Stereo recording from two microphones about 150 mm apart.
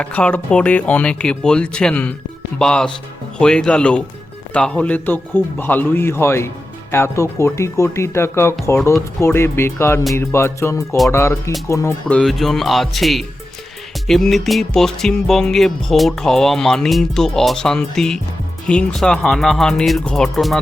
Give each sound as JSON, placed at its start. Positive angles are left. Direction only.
{"t": 0.0, "sound": "speech", "side_deg": 10}
{"t": 2.6, "sound": "music", "side_deg": 5}
{"t": 3.3, "sound": "speech", "side_deg": 5}
{"t": 12.0, "sound": "music", "side_deg": 5}